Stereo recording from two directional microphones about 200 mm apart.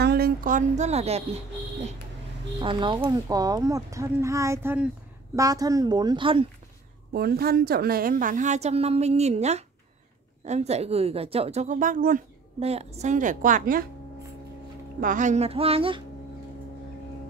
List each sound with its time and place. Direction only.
0.0 s speech: 50° right (ahead or behind); by 1.4 s 30° right (ahead or behind)
2.6 s a woman's voice: 25° right (ahead or behind)
7.1 s a woman's voice: 50° right (ahead or behind)
12.6 s a woman's voice: 30° right (ahead or behind)
15.0 s a woman's voice: 40° right (ahead or behind)